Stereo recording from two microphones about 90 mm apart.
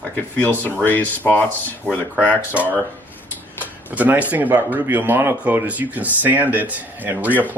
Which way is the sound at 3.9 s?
20° right (ahead or behind).